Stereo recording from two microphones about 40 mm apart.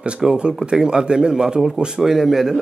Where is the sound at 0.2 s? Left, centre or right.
Right.